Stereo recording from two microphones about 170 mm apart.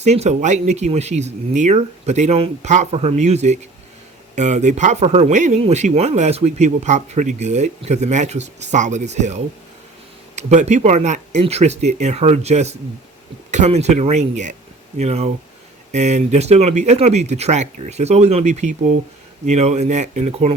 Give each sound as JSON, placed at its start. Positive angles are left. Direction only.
{"t": 0.0, "sound": "speech", "side_deg": -40}